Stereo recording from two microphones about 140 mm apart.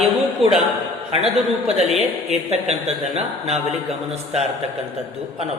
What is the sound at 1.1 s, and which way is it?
Speech, 45° right (ahead or behind).